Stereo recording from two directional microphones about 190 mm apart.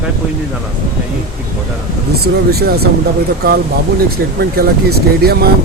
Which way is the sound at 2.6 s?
55° right (ahead or behind).